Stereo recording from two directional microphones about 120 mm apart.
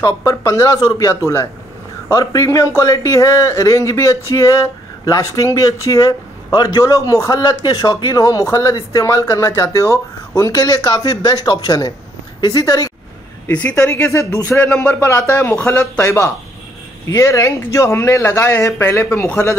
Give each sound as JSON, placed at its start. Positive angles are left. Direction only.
{"t": 0.0, "sound": "speech", "side_deg": 25}
{"t": 13.5, "sound": "speech", "side_deg": 10}
{"t": 13.7, "sound": "speech", "side_deg": 25}
{"t": 16.0, "sound": "speech", "side_deg": 25}